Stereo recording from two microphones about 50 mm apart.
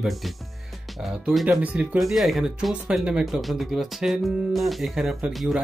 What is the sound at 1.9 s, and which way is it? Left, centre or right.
Speech, centre.